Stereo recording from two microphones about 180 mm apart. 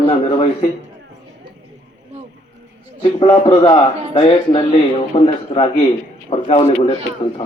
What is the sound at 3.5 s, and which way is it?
A man's voice, 30° left (ahead or behind).